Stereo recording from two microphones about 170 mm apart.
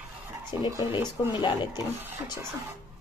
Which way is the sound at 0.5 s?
30° left (ahead or behind).